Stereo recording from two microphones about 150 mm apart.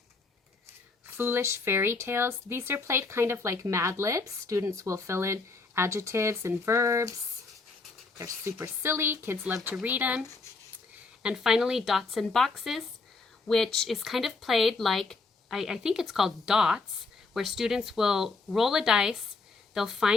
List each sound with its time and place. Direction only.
1.1 s speech: 15° right (ahead or behind)
8.2 s speech: 20° right (ahead or behind); by 20.1 s centre (ahead or behind)